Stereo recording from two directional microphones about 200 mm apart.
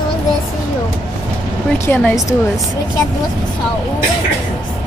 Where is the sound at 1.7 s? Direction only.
10° left (ahead or behind).